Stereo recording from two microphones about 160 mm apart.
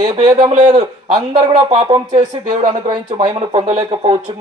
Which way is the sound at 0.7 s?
35° right (ahead or behind).